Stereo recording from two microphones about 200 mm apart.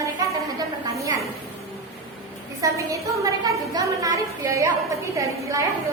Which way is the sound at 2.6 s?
15° right (ahead or behind).